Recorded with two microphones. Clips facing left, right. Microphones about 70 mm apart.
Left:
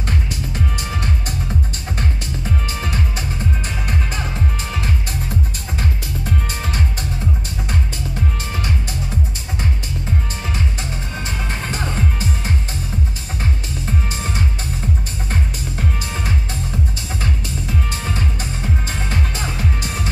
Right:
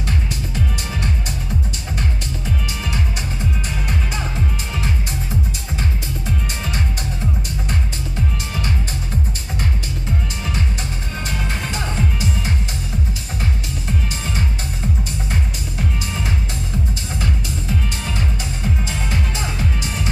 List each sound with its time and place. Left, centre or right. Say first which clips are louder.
2.0 s music: left 1 dB; left
5.8 s music: left 3 dB; left
11.2 s music: right 1 dB; left
13.8 s music: left 2 dB; left
18.0 s music: left 1 dB; left